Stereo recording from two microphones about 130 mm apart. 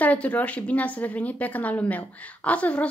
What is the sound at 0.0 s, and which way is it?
A woman's voice, 10° left (ahead or behind).